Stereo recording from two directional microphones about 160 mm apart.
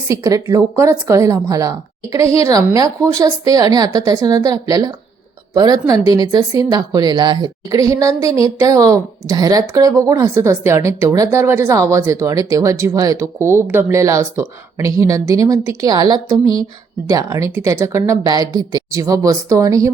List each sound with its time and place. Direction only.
0.1 s speech: 20° right (ahead or behind)